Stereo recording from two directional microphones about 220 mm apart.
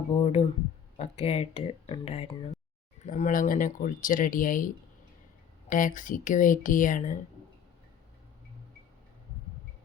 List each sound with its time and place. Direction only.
0.1 s speech: 25° left (ahead or behind)